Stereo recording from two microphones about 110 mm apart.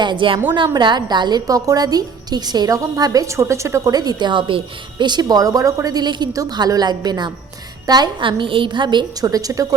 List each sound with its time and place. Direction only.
0.0 s a woman's voice: 45° right (ahead or behind)